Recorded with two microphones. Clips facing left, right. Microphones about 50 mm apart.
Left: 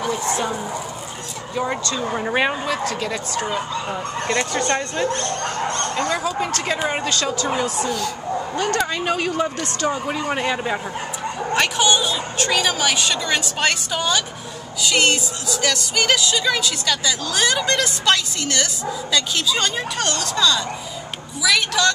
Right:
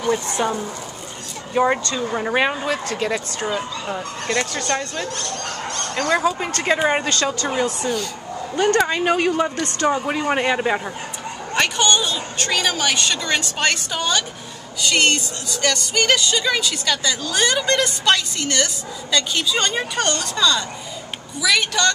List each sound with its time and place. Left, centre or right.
0.0 s speech: centre
1.5 s speech: right
1.9 s speech: centre
3.4 s speech: centre
4.4 s speech: left
5.9 s speech: right
6.6 s a woman's voice: centre
8.8 s a woman's voice: centre
9.3 s a woman's voice: centre
11.5 s speech: centre